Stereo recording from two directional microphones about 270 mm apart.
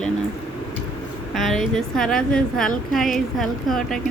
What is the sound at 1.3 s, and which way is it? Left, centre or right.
Speech, centre.